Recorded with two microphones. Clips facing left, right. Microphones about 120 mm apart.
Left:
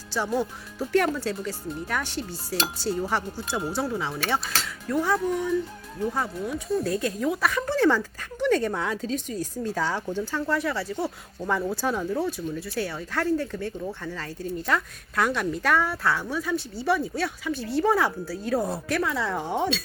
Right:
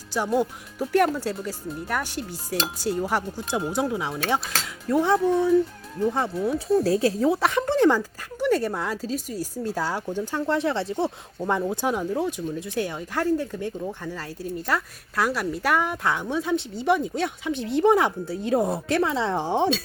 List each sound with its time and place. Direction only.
0.1 s speech: 15° right (ahead or behind)
4.9 s speech: 25° right (ahead or behind)